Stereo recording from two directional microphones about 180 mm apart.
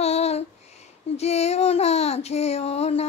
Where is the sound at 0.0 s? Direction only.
35° left (ahead or behind).